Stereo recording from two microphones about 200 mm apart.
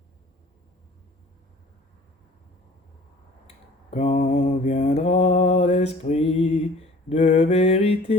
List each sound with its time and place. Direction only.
3.9 s mantra: 35° left (ahead or behind)